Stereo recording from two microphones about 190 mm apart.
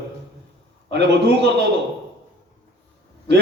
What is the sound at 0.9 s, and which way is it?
Speech, 65° right (ahead or behind).